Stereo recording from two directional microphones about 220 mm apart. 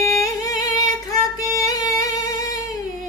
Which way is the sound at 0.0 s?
15° left (ahead or behind).